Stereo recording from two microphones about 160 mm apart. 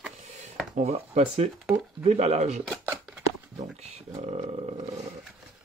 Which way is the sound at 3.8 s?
40° right (ahead or behind).